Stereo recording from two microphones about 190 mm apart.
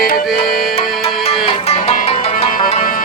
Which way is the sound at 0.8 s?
30° left (ahead or behind).